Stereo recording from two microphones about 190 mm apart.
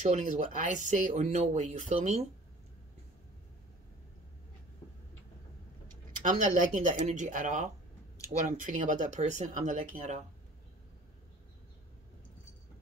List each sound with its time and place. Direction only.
0.0 s speech: 40° right (ahead or behind)
6.2 s speech: 40° right (ahead or behind)